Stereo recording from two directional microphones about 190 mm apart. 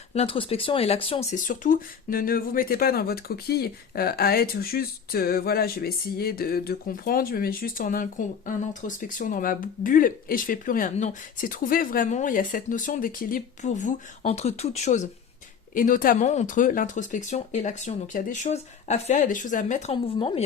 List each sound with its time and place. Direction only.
0.1 s speech: 30° left (ahead or behind)